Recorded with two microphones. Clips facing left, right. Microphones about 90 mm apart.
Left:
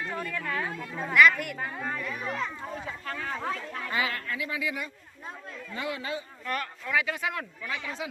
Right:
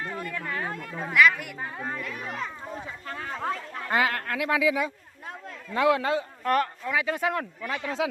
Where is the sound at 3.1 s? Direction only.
35° right (ahead or behind).